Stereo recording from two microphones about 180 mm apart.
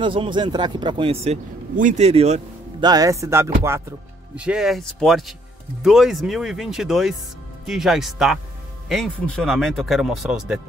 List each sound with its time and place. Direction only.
0.0 s speech: 25° right (ahead or behind)
1.2 s speech: 40° right (ahead or behind)
2.8 s speech: 20° right (ahead or behind)
4.4 s speech: 5° right (ahead or behind)